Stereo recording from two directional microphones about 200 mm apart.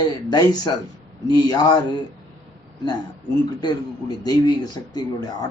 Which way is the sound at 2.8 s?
20° left (ahead or behind).